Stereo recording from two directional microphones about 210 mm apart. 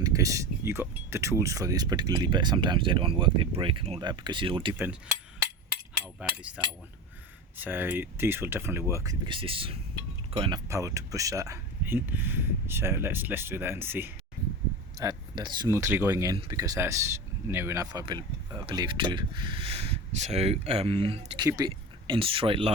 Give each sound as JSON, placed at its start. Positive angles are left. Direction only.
{"t": 0.0, "sound": "speech", "side_deg": -15}
{"t": 6.1, "sound": "speech", "side_deg": -5}